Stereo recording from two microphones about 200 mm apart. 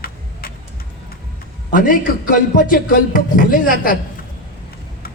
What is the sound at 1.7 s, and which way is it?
A man's voice, 45° left (ahead or behind).